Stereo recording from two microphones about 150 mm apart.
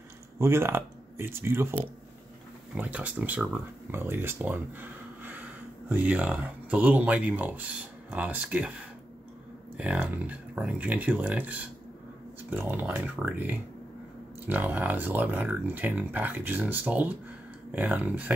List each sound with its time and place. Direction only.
0.4 s speech: 15° right (ahead or behind)
9.8 s speech: 10° right (ahead or behind)